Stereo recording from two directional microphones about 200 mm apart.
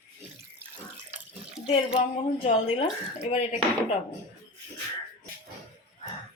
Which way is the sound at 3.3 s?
30° left (ahead or behind).